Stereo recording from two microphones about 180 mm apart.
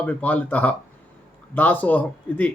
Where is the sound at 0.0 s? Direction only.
10° left (ahead or behind).